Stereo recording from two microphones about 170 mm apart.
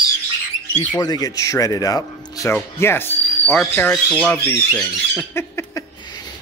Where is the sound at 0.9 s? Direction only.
20° left (ahead or behind); by 4.4 s centre (ahead or behind).